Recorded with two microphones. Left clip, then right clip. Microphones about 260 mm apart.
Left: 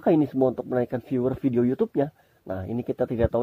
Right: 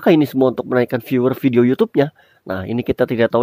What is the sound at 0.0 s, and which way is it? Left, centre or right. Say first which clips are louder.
Speech: right 7 dB; right.